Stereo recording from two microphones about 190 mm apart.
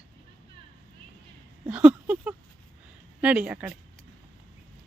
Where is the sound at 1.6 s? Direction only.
5° right (ahead or behind).